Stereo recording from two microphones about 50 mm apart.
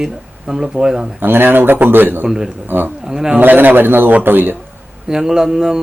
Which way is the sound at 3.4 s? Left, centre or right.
Right.